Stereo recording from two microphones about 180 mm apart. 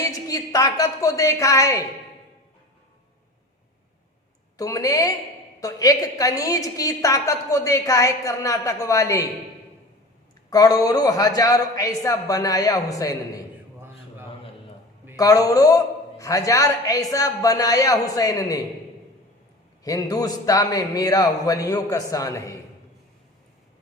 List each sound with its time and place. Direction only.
0.0 s a woman's voice: 20° left (ahead or behind)
4.5 s a woman's voice: 20° left (ahead or behind)
10.5 s a woman's voice: 20° left (ahead or behind)
15.1 s a woman's voice: 20° left (ahead or behind)
19.8 s a woman's voice: 20° left (ahead or behind)